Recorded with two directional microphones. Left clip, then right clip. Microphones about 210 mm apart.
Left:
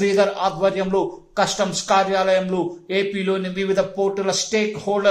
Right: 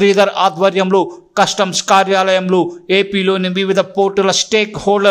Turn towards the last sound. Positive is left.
turn(degrees=-30)  # may be behind; listen again after turning